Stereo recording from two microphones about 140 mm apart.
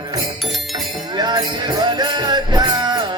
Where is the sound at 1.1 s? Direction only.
30° right (ahead or behind).